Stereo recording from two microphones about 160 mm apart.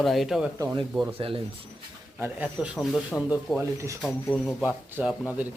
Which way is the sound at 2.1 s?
10° right (ahead or behind).